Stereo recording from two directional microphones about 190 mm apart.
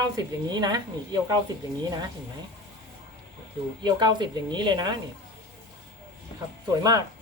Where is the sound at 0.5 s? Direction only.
20° right (ahead or behind).